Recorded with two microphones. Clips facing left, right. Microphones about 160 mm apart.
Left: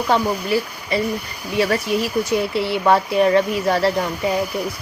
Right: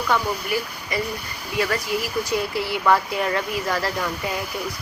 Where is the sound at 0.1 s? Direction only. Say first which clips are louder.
Left 5 dB; 25° left (ahead or behind).